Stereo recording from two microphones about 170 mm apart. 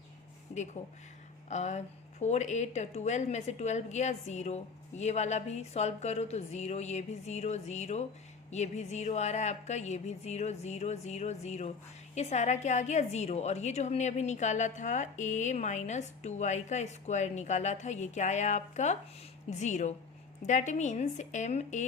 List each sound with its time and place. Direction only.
0.5 s a woman's voice: 45° left (ahead or behind)